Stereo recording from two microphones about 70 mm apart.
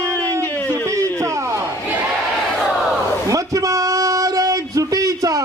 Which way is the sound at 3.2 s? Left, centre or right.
Right.